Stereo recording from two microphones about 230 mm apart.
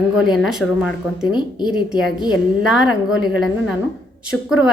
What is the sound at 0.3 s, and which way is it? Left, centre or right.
Speech, centre.